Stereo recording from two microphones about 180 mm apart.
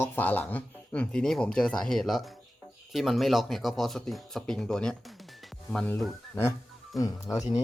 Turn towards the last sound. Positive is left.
turn(degrees=20)  # may be behind; listen again after turning